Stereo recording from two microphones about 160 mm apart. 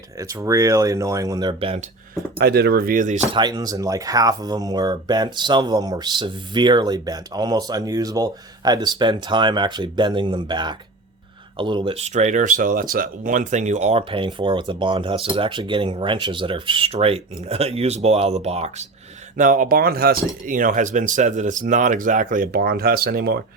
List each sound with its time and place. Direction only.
0.2 s speech: 20° right (ahead or behind)
2.4 s speech: 85° right; by 3.2 s 50° right (ahead or behind)
3.3 s speech: 25° right (ahead or behind); by 18.9 s 40° right (ahead or behind)
19.4 s speech: 60° right (ahead or behind)
20.5 s speech: 55° right (ahead or behind); by 23.4 s 75° right (ahead or behind)